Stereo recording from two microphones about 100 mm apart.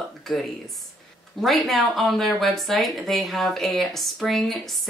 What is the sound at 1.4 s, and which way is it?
Speech, centre (ahead or behind).